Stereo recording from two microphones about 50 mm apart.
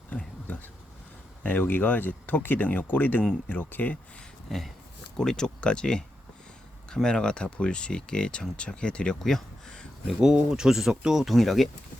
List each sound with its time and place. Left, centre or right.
1.5 s speech: left
4.5 s speech: centre
9.1 s speech: centre
10.2 s speech: centre